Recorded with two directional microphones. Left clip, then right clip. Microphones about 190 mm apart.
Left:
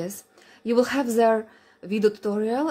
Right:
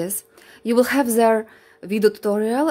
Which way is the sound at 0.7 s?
35° right (ahead or behind).